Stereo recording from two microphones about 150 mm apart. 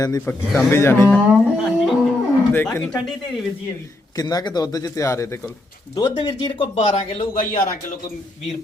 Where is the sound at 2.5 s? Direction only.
15° left (ahead or behind).